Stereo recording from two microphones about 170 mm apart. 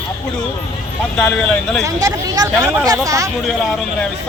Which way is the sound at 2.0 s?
20° right (ahead or behind).